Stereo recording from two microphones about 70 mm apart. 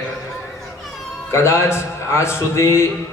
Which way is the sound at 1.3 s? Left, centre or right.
Left.